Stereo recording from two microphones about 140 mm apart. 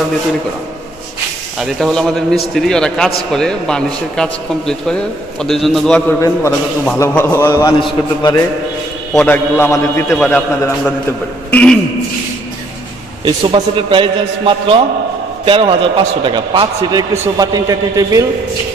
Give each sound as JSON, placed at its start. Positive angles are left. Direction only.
{"t": 1.6, "sound": "a man's voice", "side_deg": 5}
{"t": 5.9, "sound": "a man's voice", "side_deg": 20}
{"t": 7.8, "sound": "a man's voice", "side_deg": 30}
{"t": 9.1, "sound": "a man's voice", "side_deg": 10}
{"t": 10.1, "sound": "a man's voice", "side_deg": 5}
{"t": 11.5, "sound": "a man's voice", "side_deg": 5}
{"t": 13.2, "sound": "a man's voice", "side_deg": -35}